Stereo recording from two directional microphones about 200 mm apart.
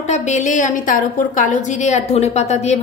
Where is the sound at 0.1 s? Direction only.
35° left (ahead or behind).